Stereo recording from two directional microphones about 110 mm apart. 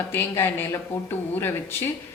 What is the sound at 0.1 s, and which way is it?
Speech, 20° left (ahead or behind).